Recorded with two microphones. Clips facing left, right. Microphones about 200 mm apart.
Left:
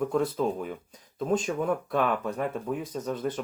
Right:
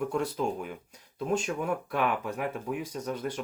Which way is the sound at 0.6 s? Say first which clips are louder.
Left 4 dB; 10° right (ahead or behind).